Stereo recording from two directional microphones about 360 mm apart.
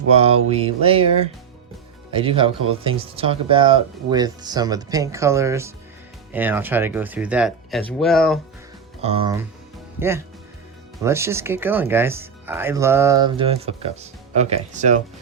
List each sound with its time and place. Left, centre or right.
0.2 s speech: centre
2.1 s speech: centre
9.0 s speech: centre